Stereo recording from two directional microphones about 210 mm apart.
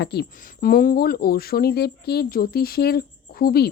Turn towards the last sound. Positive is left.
turn(degrees=45)  # may be behind; listen again after turning